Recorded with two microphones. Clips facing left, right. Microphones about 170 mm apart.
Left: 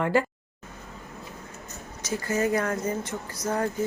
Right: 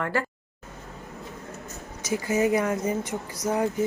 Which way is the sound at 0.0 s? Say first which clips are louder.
Left 4 dB; 20° left (ahead or behind).